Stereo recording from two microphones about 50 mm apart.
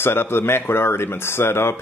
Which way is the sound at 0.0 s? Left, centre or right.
Left.